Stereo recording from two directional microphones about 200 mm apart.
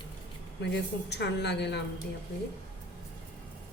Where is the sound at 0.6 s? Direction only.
55° left (ahead or behind).